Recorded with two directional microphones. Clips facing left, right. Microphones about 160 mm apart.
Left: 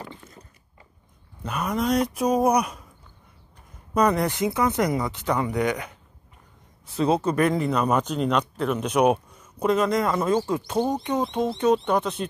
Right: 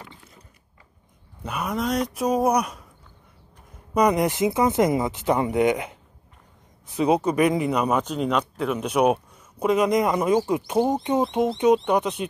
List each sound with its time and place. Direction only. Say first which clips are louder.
1.4 s speech: left 1 dB; 5° right (ahead or behind)
3.9 s speech: right 1 dB; 15° right (ahead or behind)
7.0 s speech: right 2 dB; 10° right (ahead or behind)